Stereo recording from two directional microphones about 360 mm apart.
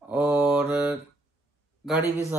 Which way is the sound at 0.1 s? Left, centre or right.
Centre.